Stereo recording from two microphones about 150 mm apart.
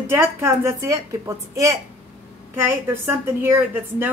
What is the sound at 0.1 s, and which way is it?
A woman's voice, 15° right (ahead or behind).